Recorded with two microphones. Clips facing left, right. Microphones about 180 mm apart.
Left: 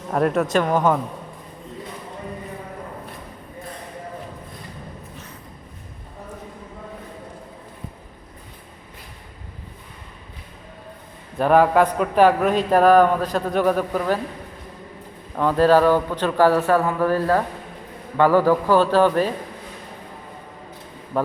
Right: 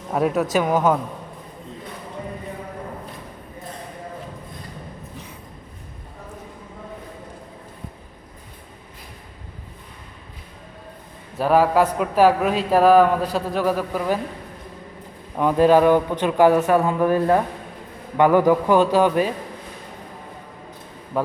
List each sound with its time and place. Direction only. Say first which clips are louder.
0.1 s a man's voice: left 1 dB; 5° right (ahead or behind)
11.3 s a man's voice: left 1 dB; 5° right (ahead or behind)
15.4 s a man's voice: right 1 dB; 15° right (ahead or behind)